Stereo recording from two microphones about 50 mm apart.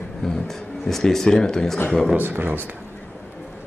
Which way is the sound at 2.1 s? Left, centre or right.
Right.